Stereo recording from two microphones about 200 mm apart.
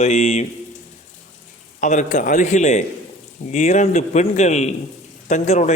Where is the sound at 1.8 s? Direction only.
40° left (ahead or behind).